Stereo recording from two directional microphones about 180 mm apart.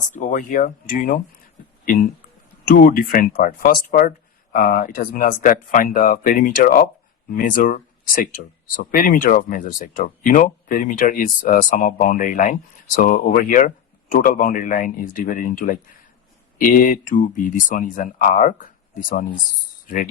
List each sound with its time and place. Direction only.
0.1 s speech: 45° left (ahead or behind)
2.6 s speech: 50° left (ahead or behind)